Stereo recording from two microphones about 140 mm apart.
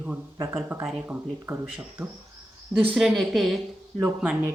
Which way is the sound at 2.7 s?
5° right (ahead or behind).